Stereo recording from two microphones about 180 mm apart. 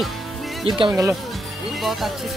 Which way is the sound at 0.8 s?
20° right (ahead or behind).